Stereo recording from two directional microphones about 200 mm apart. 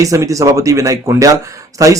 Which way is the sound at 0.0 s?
15° right (ahead or behind).